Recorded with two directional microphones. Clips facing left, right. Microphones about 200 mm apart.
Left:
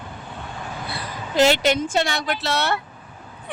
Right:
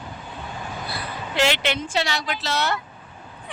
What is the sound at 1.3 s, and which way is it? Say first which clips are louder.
Speech: left 5 dB; 40° left (ahead or behind).